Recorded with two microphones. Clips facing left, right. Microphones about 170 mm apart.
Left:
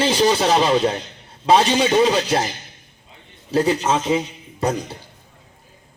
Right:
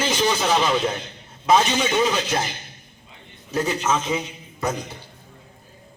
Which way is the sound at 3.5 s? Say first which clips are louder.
Left 4 dB; 30° left (ahead or behind).